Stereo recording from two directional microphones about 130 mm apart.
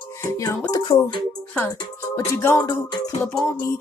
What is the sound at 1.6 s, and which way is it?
Music, 20° left (ahead or behind).